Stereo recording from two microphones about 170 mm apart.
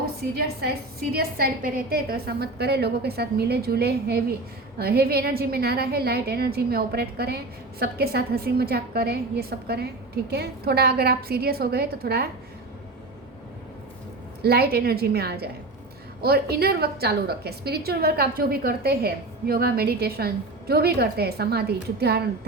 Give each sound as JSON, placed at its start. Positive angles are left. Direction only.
{"t": 0.0, "sound": "a woman's voice", "side_deg": -65}
{"t": 14.4, "sound": "a woman's voice", "side_deg": -65}